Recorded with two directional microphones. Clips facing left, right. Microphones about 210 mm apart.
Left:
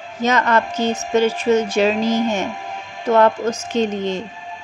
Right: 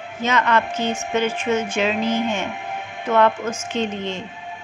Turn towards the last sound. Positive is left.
turn(degrees=40)  # may be behind; listen again after turning